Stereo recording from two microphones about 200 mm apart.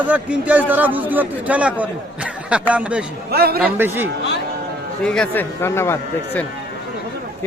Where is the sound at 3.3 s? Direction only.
50° right (ahead or behind).